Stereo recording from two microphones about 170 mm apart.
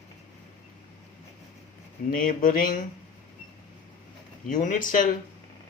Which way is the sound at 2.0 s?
55° left (ahead or behind).